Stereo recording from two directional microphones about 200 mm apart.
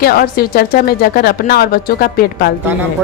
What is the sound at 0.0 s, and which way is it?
Speech, 50° left (ahead or behind).